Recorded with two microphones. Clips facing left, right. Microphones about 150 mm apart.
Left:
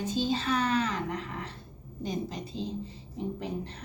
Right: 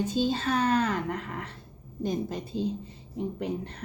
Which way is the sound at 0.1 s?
50° right (ahead or behind).